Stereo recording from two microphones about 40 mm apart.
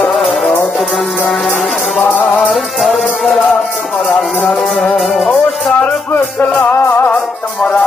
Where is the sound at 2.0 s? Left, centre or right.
Left.